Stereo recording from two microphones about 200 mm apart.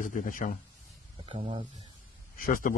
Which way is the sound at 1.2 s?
25° right (ahead or behind).